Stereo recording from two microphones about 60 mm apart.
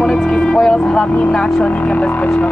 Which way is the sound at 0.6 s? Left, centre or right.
Centre.